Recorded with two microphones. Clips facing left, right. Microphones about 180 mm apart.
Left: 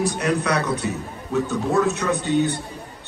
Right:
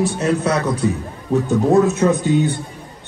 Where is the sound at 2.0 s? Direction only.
30° right (ahead or behind).